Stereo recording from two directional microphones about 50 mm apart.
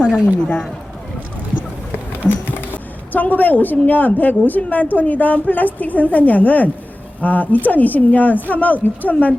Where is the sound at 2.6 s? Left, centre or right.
Left.